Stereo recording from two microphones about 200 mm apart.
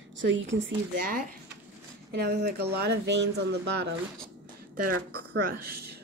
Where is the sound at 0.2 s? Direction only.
65° right (ahead or behind).